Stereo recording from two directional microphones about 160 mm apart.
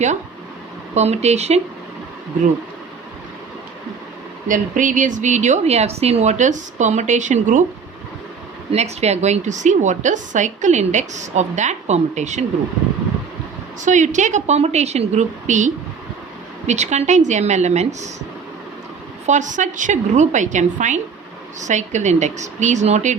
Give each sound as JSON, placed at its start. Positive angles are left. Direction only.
{"t": 0.9, "sound": "a woman's voice", "side_deg": -45}
{"t": 4.4, "sound": "a woman's voice", "side_deg": -55}
{"t": 8.7, "sound": "a woman's voice", "side_deg": -45}
{"t": 13.8, "sound": "a woman's voice", "side_deg": -50}
{"t": 19.2, "sound": "a woman's voice", "side_deg": -50}